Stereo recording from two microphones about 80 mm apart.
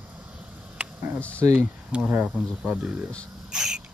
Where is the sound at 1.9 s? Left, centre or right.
Centre.